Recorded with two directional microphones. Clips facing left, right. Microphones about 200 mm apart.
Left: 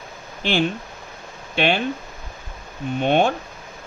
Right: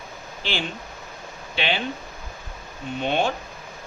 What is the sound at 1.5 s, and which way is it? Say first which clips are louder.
Speech: left 6 dB; 50° left (ahead or behind).